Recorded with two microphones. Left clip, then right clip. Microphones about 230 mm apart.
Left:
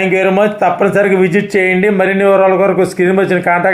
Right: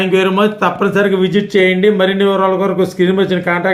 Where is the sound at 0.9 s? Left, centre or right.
Left.